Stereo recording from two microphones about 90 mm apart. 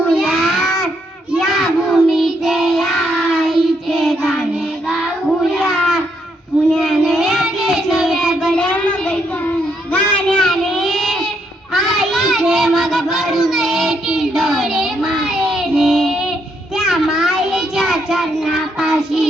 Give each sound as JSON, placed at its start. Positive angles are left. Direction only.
{"t": 0.1, "sound": "child singing", "side_deg": 0}
{"t": 5.5, "sound": "a sound", "side_deg": 0}
{"t": 6.7, "sound": "child singing", "side_deg": 0}
{"t": 8.5, "sound": "child singing", "side_deg": 15}
{"t": 10.2, "sound": "child singing", "side_deg": 5}